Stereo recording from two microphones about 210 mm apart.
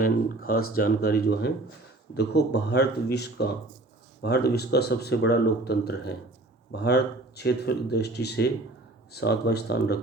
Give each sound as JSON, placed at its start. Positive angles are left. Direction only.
{"t": 0.0, "sound": "speech", "side_deg": 45}